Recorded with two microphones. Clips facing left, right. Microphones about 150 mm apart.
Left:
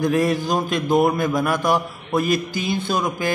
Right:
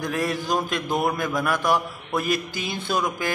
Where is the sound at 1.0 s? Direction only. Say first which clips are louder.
Left 5 dB; 15° left (ahead or behind).